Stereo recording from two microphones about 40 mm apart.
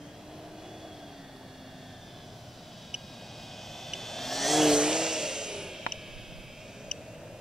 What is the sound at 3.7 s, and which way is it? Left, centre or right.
Vehicle, centre.